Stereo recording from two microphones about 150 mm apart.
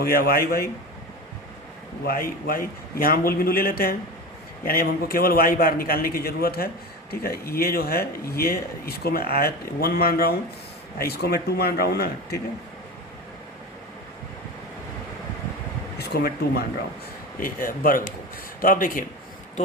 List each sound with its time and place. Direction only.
0.0 s speech: 85° left
2.0 s a man's voice: 80° left
16.0 s speech: 90° left
17.4 s a man's voice: 70° left (ahead or behind)